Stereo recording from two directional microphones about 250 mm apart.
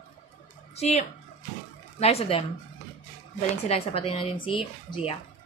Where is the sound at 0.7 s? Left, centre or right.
Left.